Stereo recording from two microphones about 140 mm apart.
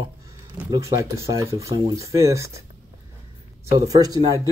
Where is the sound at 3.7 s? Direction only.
25° right (ahead or behind).